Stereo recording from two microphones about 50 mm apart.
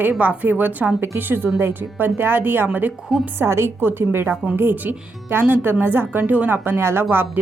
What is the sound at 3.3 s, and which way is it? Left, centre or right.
Speech, right.